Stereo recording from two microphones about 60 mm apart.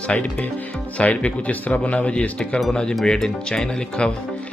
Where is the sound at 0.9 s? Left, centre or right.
Left.